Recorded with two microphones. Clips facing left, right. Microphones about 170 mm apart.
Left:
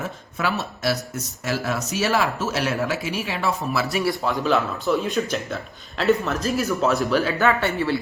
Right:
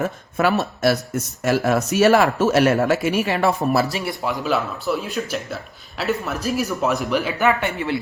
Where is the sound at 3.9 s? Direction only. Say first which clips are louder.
Left 2 dB; 20° right (ahead or behind).